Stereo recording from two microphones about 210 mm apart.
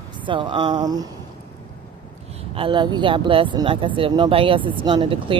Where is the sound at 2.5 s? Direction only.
25° right (ahead or behind).